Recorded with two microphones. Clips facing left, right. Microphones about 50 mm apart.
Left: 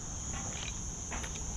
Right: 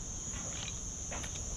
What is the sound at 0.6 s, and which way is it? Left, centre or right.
Cricket, centre.